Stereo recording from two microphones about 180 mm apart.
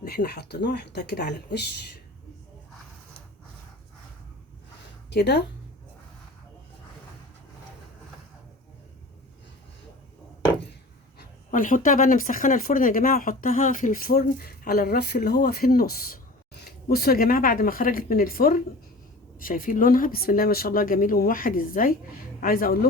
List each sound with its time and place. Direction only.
0.0 s speech: 60° left (ahead or behind)
5.1 s speech: 65° left (ahead or behind)
11.2 s speech: 50° left (ahead or behind)